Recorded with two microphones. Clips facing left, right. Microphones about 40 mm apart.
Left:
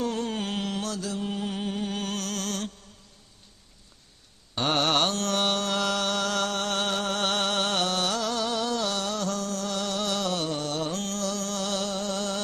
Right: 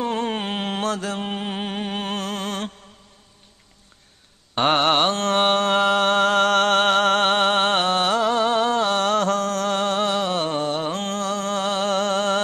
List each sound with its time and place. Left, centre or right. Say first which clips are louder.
0.0 s mantra: right 5 dB; right
4.6 s mantra: right 6 dB; right